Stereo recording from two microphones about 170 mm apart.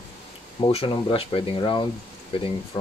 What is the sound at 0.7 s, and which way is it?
Speech, 35° left (ahead or behind).